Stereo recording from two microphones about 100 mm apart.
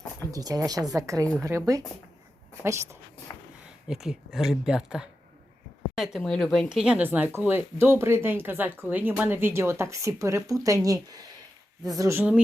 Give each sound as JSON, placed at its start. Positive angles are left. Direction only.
{"t": 0.3, "sound": "speech", "side_deg": -35}
{"t": 3.8, "sound": "speech", "side_deg": -5}
{"t": 6.7, "sound": "speech", "side_deg": -10}